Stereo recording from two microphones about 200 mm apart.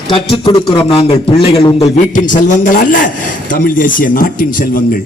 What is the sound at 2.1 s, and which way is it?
A man's voice, 40° left (ahead or behind).